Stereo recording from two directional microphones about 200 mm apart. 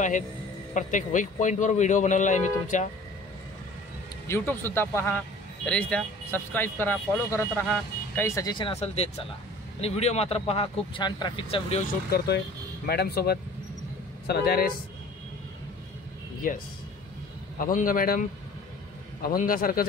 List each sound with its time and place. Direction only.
0.7 s a man's voice: 40° left (ahead or behind)
4.3 s a man's voice: 10° left (ahead or behind)
12.8 s a man's voice: 55° left (ahead or behind)
16.4 s a man's voice: 45° left (ahead or behind)
19.2 s a man's voice: 45° left (ahead or behind)